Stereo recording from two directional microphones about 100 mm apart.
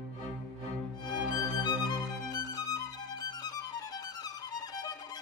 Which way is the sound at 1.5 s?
45° left (ahead or behind).